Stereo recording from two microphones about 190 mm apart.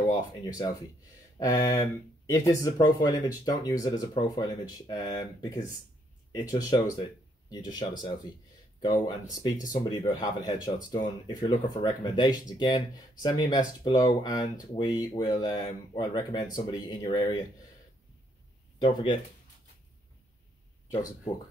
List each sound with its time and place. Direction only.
0.1 s speech: 20° left (ahead or behind)
18.8 s speech: 25° left (ahead or behind)